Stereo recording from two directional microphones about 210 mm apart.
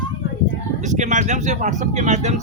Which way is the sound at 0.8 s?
35° right (ahead or behind).